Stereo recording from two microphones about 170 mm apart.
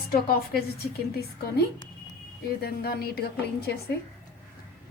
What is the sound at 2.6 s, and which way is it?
A woman's voice, 65° left (ahead or behind).